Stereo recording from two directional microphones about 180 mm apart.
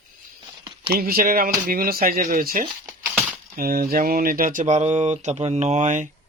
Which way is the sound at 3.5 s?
55° right (ahead or behind).